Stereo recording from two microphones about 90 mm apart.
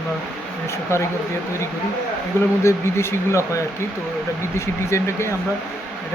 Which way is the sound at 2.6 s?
30° left (ahead or behind).